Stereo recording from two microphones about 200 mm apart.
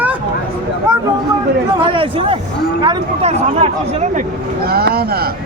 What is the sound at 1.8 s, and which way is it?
A man's voice, 25° right (ahead or behind).